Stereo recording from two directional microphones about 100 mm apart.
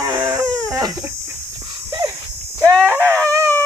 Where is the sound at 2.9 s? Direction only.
25° right (ahead or behind).